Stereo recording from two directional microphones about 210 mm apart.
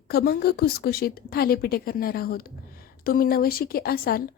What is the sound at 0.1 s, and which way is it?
A woman's voice, 45° left (ahead or behind).